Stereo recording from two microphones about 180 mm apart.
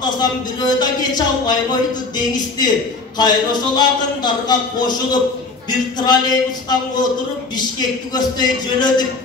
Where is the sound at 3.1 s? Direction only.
25° left (ahead or behind).